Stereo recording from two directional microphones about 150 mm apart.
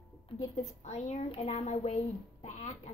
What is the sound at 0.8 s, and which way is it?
A child's voice, 50° left (ahead or behind).